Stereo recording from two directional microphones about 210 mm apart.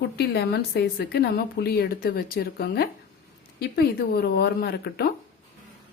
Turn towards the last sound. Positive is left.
turn(degrees=50)  # may be behind; listen again after turning